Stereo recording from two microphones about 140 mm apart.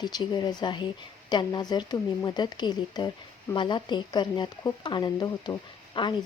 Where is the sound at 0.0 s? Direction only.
30° left (ahead or behind).